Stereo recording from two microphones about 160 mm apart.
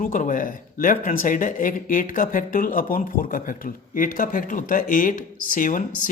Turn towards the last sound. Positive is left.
turn(degrees=55)  # may be behind; listen again after turning